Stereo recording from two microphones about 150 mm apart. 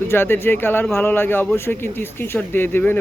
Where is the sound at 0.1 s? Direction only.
15° left (ahead or behind).